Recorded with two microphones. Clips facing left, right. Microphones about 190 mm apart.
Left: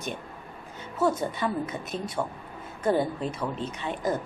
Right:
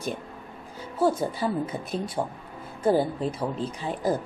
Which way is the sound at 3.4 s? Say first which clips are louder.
Right 2 dB; 30° right (ahead or behind).